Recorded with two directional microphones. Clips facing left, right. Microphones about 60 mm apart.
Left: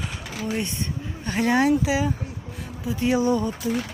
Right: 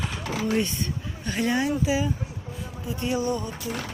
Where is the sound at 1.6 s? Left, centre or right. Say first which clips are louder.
Left 4 dB; left.